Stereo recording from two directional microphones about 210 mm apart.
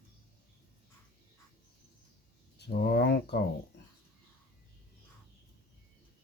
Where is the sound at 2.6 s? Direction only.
50° left (ahead or behind).